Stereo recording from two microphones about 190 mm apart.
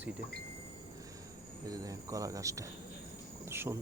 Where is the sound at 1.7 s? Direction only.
20° right (ahead or behind).